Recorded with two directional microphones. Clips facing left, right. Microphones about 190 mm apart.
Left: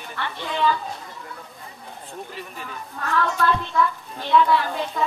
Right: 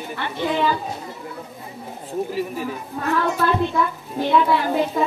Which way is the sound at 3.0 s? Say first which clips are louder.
Right 2 dB; 20° right (ahead or behind).